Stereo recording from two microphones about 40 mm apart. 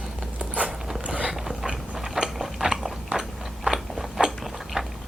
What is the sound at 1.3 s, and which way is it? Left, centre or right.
Biting, centre.